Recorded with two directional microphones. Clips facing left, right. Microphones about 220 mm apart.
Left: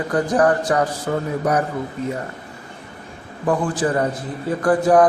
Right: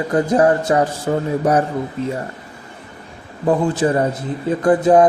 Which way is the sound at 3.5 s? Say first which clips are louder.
Right 4 dB; 25° right (ahead or behind).